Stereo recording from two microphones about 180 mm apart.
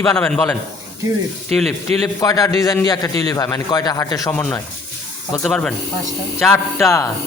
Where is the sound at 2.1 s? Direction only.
20° left (ahead or behind).